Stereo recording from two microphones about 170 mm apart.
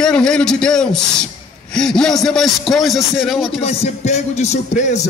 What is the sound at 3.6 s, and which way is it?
Speech, 40° left (ahead or behind).